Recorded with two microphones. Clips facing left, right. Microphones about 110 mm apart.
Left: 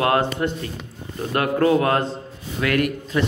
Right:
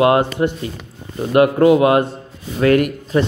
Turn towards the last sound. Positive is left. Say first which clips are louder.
# right 4 dB
turn(degrees=-35)  # may be behind; listen again after turning